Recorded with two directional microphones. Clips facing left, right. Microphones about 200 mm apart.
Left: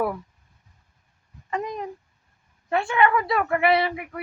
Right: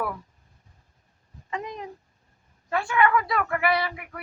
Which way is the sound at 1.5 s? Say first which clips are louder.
Left 5 dB; 45° left (ahead or behind).